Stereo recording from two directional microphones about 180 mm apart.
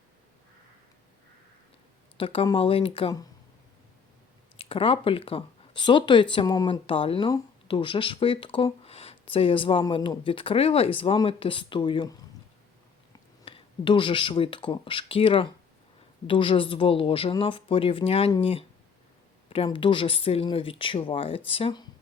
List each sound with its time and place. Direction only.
2.1 s speech: 30° left (ahead or behind)
4.5 s speech: 30° left (ahead or behind)
13.4 s speech: 30° left (ahead or behind)